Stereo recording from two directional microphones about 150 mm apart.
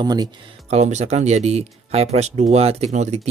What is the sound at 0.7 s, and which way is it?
Speech, 50° right (ahead or behind).